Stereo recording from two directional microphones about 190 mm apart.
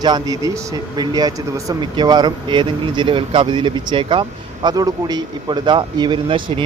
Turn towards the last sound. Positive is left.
turn(degrees=-25)  # may be behind; listen again after turning